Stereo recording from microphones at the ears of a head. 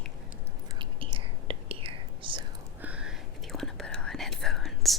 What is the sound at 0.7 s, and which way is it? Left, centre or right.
Whispering, right.